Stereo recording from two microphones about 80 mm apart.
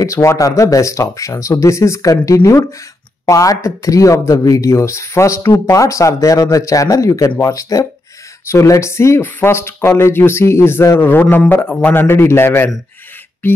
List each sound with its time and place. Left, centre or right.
0.0 s a man's voice: left